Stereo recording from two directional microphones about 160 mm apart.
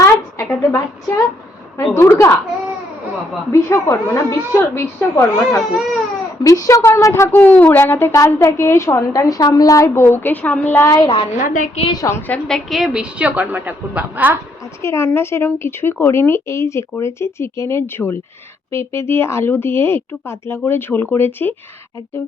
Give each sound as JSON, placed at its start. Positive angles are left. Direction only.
{"t": 0.0, "sound": "a sound", "side_deg": 20}
{"t": 1.9, "sound": "a woman's voice", "side_deg": 15}
{"t": 3.5, "sound": "a woman's voice", "side_deg": 15}
{"t": 11.3, "sound": "a woman's voice", "side_deg": 55}
{"t": 11.8, "sound": "a woman's voice", "side_deg": 25}
{"t": 12.5, "sound": "a woman's voice", "side_deg": 0}
{"t": 14.8, "sound": "a woman's voice", "side_deg": 15}